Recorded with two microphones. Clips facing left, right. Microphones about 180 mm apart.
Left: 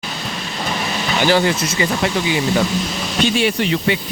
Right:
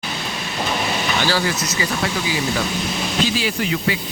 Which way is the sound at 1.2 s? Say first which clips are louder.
Left 9 dB; 20° left (ahead or behind).